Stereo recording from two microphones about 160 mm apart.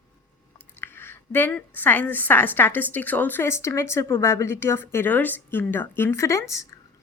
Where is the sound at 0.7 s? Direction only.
15° left (ahead or behind).